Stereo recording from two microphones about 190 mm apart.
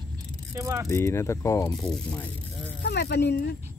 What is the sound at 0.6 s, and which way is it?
Speech, 15° right (ahead or behind).